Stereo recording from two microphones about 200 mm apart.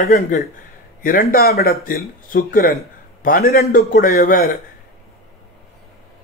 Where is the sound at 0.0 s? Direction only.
45° left (ahead or behind).